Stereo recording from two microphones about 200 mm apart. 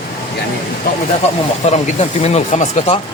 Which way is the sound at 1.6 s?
35° left (ahead or behind).